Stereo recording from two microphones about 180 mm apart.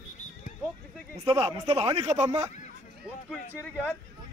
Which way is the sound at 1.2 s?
30° right (ahead or behind).